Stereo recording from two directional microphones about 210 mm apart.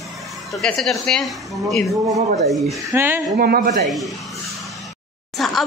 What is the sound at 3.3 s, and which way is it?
Speech, 45° right (ahead or behind).